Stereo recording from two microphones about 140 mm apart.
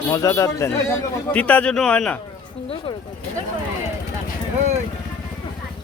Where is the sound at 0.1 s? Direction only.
25° left (ahead or behind).